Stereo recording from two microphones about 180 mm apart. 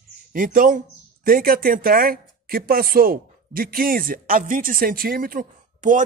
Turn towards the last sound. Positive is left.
turn(degrees=-45)  # may be behind; listen again after turning